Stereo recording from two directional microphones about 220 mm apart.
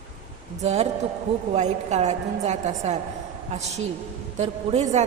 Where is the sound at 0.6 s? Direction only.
30° right (ahead or behind).